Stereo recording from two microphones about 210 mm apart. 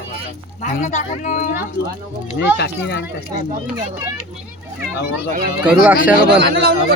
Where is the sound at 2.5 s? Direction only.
50° left (ahead or behind).